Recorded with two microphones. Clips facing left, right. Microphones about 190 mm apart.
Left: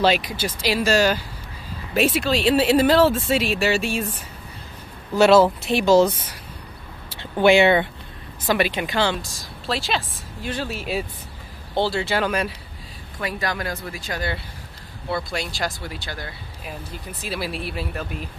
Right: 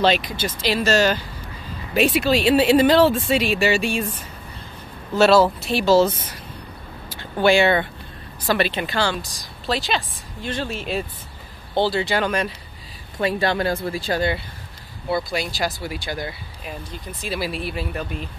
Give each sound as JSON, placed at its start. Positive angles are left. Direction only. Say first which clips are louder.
{"t": 0.0, "sound": "a woman's voice", "louder": "even", "side_deg": 10}
{"t": 5.1, "sound": "a woman's voice", "louder": "left 1 dB", "side_deg": 15}
{"t": 9.2, "sound": "a woman's voice", "louder": "right 1 dB", "side_deg": 0}
{"t": 13.2, "sound": "speech", "louder": "right 6 dB", "side_deg": -30}
{"t": 15.0, "sound": "speech", "louder": "right 3 dB", "side_deg": 0}
{"t": 16.6, "sound": "speech", "louder": "right 1 dB", "side_deg": 5}